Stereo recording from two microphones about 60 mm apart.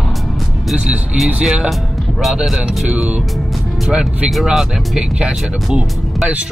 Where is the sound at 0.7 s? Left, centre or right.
Centre.